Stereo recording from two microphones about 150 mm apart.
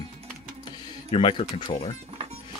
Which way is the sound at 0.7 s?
35° left (ahead or behind).